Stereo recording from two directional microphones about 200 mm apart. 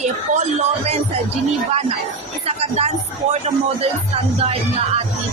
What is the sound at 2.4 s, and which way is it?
Speech, 30° right (ahead or behind).